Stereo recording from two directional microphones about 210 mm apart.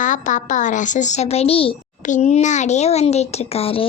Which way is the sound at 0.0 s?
35° left (ahead or behind).